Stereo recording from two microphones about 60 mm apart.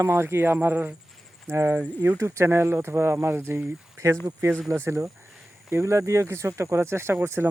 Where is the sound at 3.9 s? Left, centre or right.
Right.